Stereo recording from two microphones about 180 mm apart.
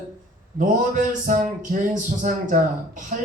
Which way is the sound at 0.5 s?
45° right (ahead or behind).